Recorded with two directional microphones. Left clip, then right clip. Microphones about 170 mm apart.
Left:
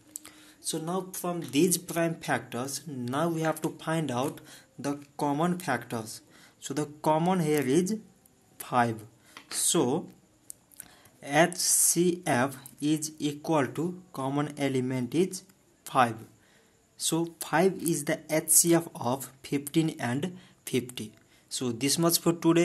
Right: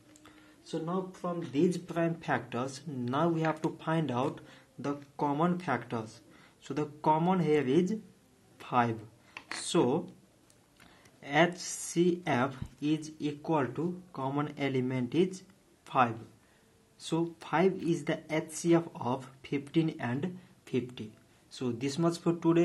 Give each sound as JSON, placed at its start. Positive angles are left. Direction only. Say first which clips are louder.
{"t": 0.2, "sound": "speech", "louder": "left 8 dB", "side_deg": 40}
{"t": 8.5, "sound": "a sound", "louder": "left 3 dB", "side_deg": 25}
{"t": 9.7, "sound": "speech", "louder": "left 1 dB", "side_deg": 20}
{"t": 11.1, "sound": "speech", "louder": "left 3 dB", "side_deg": 25}